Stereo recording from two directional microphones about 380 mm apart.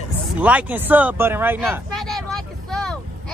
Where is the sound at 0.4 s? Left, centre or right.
Centre.